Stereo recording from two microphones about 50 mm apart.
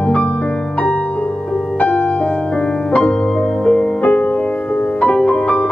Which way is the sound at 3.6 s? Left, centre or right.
Centre.